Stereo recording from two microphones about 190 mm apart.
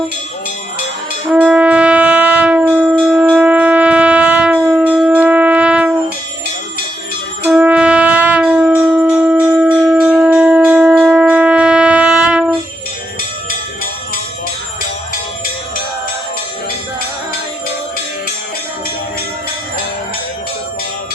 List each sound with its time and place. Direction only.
1.3 s shofar: 5° right (ahead or behind)
7.4 s shofar: 5° right (ahead or behind)
9.0 s wind instrument: 5° right (ahead or behind)